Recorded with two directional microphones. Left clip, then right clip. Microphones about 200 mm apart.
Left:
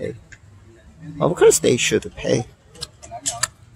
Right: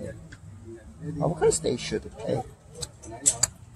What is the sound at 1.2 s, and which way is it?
Speech, 35° left (ahead or behind).